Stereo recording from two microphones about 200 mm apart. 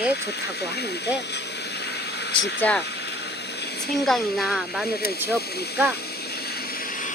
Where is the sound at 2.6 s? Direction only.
5° left (ahead or behind).